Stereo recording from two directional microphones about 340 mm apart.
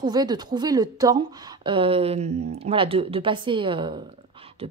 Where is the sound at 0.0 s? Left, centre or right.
Centre.